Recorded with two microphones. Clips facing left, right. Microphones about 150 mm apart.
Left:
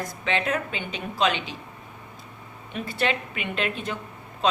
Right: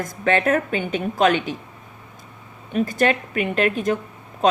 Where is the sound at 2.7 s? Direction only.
45° right (ahead or behind).